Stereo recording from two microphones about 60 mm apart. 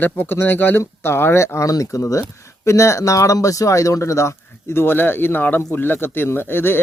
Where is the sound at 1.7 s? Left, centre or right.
Left.